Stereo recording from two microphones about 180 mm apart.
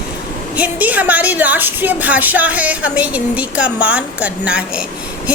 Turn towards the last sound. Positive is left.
turn(degrees=-5)  # may be behind; listen again after turning